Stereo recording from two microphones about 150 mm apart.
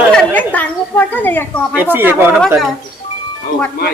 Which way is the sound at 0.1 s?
10° left (ahead or behind).